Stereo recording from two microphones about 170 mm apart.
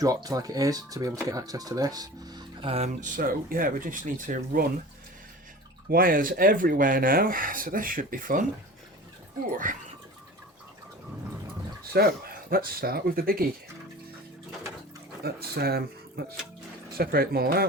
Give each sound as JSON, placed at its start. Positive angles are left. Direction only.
{"t": 0.0, "sound": "speech", "side_deg": -20}
{"t": 5.9, "sound": "speech", "side_deg": -55}
{"t": 9.7, "sound": "speech", "side_deg": -50}
{"t": 11.9, "sound": "speech", "side_deg": -65}
{"t": 15.2, "sound": "speech", "side_deg": -65}